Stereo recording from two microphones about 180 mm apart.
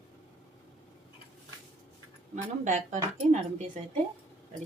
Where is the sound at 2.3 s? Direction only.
45° right (ahead or behind).